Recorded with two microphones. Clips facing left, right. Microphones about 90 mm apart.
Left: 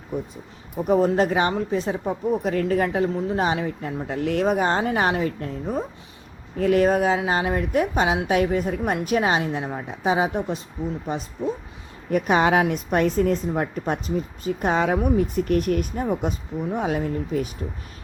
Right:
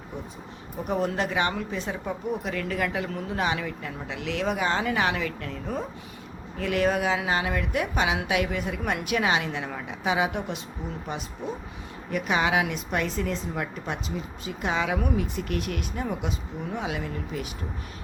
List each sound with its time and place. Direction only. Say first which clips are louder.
0.9 s speech: left 8 dB; 35° left (ahead or behind)
12.1 s a woman's voice: left 6 dB; 45° left (ahead or behind)